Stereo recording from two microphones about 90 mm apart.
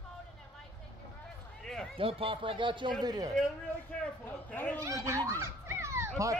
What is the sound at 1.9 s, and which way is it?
Speech, 85° right.